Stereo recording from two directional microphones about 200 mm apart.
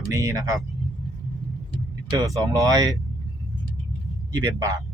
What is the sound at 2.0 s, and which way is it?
Speech, 15° right (ahead or behind).